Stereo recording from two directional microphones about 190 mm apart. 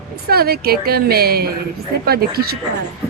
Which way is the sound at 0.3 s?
55° right (ahead or behind).